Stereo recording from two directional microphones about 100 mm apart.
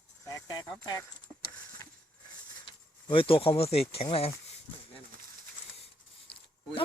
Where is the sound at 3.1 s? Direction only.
60° left (ahead or behind).